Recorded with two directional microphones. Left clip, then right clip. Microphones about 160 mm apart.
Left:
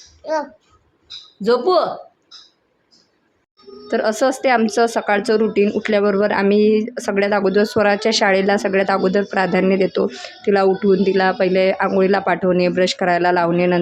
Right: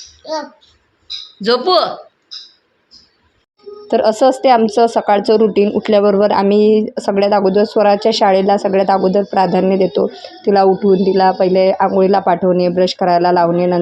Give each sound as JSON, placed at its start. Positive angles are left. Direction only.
{"t": 1.4, "sound": "speech", "side_deg": 5}
{"t": 3.8, "sound": "speech", "side_deg": -15}